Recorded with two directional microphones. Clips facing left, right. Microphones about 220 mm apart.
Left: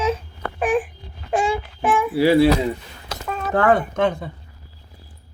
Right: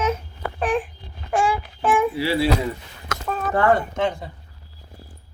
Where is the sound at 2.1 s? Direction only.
45° left (ahead or behind).